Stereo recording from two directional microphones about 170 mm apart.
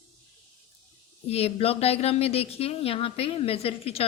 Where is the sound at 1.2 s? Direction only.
35° left (ahead or behind).